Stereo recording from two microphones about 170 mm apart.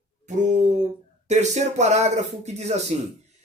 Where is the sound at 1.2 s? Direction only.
40° right (ahead or behind).